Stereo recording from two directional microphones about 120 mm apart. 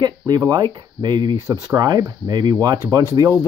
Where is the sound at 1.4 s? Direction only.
25° right (ahead or behind).